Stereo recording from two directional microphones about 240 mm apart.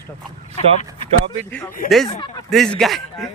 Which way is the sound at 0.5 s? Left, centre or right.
Left.